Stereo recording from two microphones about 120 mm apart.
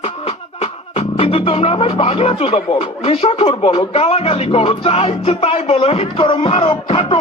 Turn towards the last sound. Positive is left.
turn(degrees=50)  # may be behind; listen again after turning